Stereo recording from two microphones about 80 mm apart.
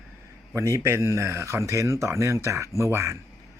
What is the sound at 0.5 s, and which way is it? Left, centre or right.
Speech, right.